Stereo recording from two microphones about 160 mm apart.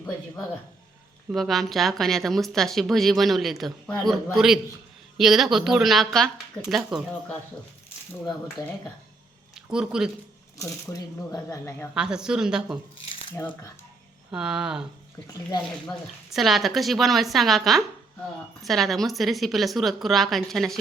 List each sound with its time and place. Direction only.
1.3 s a woman's voice: centre (ahead or behind)
9.6 s speech: 5° right (ahead or behind)
10.9 s a woman's voice: 10° left (ahead or behind)
11.9 s a woman's voice: 5° right (ahead or behind)
13.3 s a woman's voice: 15° left (ahead or behind)
14.3 s a woman's voice: 5° right (ahead or behind)
16.3 s a woman's voice: centre (ahead or behind)